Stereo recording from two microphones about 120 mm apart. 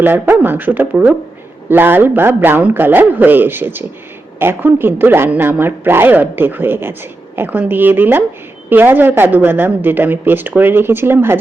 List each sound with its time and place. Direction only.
0.0 s a woman's voice: 15° right (ahead or behind)